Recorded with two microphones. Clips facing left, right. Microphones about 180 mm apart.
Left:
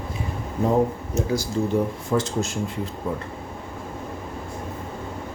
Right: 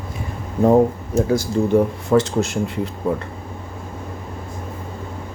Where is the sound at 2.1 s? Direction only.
70° right (ahead or behind).